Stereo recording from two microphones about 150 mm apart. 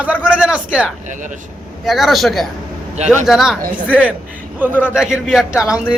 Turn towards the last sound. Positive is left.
turn(degrees=-5)  # may be behind; listen again after turning